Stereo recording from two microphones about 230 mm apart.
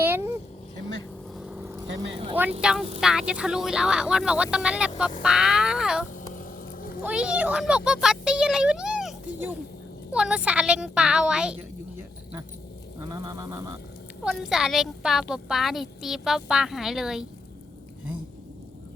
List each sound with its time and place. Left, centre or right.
0.0 s vehicle: centre
2.6 s speech: centre
6.3 s a sound: left
7.0 s speech: centre
13.0 s a sound: centre
14.3 s speech: centre